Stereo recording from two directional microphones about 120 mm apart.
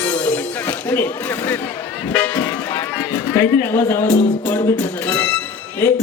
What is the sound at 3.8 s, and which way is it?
Speech, 20° left (ahead or behind).